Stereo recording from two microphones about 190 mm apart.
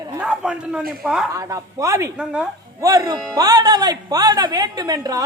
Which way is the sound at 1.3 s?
15° right (ahead or behind).